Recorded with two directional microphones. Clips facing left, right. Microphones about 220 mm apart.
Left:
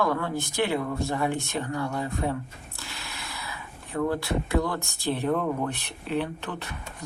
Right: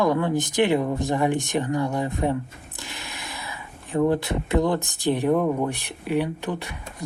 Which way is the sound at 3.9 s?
20° right (ahead or behind).